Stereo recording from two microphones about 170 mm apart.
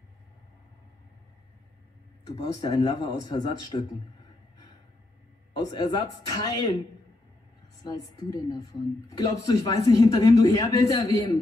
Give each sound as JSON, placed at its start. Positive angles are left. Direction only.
{"t": 2.4, "sound": "speech", "side_deg": 25}
{"t": 5.6, "sound": "speech", "side_deg": 25}
{"t": 7.8, "sound": "speech", "side_deg": 20}